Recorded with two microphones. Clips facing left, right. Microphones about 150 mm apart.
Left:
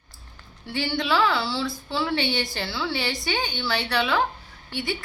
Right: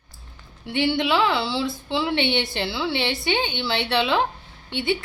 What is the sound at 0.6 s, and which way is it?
Speech, 20° right (ahead or behind).